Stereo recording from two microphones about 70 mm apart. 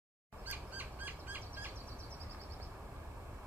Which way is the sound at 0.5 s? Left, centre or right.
Right.